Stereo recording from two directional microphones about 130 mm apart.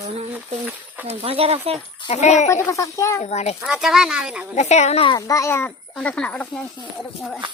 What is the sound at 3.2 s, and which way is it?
Speech, 60° left (ahead or behind).